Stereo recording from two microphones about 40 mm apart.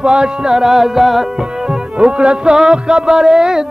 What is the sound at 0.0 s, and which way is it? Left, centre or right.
Music, right.